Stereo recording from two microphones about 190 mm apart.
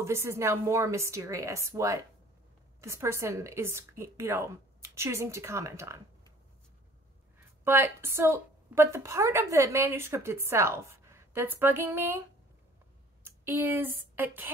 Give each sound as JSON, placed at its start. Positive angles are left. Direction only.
{"t": 0.0, "sound": "a woman's voice", "side_deg": -15}
{"t": 7.6, "sound": "a woman's voice", "side_deg": -10}
{"t": 13.2, "sound": "speech", "side_deg": -10}